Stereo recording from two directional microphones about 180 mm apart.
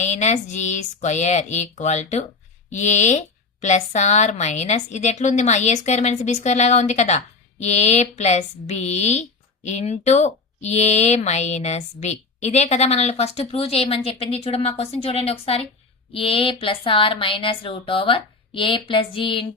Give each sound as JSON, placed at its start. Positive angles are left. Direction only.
{"t": 0.0, "sound": "speech", "side_deg": 40}